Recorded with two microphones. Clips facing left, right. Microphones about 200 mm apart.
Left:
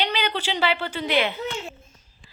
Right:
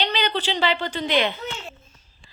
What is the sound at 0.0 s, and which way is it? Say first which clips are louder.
A woman's voice: right 1 dB; 10° left (ahead or behind).